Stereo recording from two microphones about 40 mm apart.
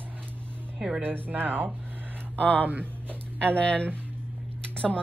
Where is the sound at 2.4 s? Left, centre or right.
Left.